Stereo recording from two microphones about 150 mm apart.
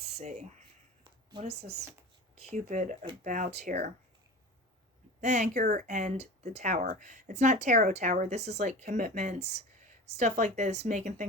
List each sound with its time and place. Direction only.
0.0 s a sound: 50° right (ahead or behind)
1.4 s speech: 45° right (ahead or behind); by 3.9 s 60° right (ahead or behind)
5.2 s speech: 55° right (ahead or behind)